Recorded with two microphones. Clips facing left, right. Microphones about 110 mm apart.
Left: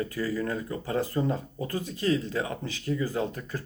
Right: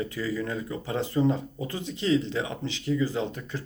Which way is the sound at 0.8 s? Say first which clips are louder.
Right 3 dB; 20° right (ahead or behind).